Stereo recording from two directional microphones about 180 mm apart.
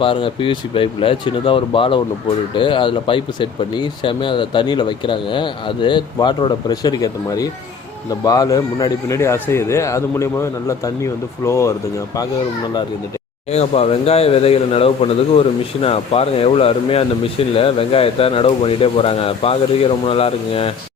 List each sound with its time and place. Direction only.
0.0 s speech: 30° left (ahead or behind)
13.5 s a man's voice: 35° left (ahead or behind)